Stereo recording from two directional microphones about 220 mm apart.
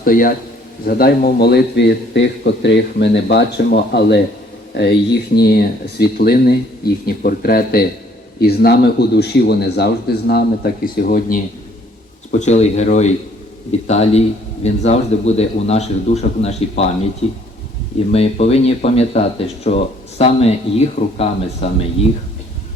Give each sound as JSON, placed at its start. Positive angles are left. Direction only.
{"t": 0.0, "sound": "a man's voice", "side_deg": 40}